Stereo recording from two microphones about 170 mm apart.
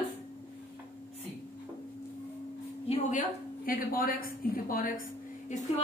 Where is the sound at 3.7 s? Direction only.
55° left (ahead or behind).